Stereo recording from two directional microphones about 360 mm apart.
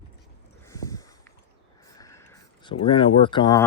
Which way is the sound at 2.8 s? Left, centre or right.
Centre.